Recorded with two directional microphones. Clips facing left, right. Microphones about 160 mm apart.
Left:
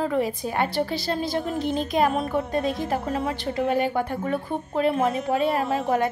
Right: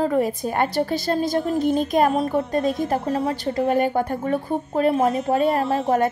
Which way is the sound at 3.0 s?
35° right (ahead or behind).